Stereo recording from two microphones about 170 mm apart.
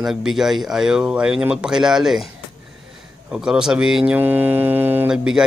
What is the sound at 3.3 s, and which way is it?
Speech, 5° right (ahead or behind).